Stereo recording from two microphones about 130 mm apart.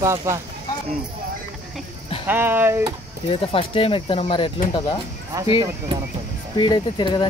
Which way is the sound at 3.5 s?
45° left (ahead or behind).